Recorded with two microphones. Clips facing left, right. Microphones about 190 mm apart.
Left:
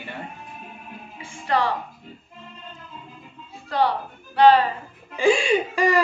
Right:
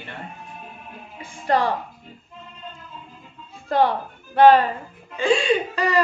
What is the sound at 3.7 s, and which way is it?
Speech, 50° right (ahead or behind).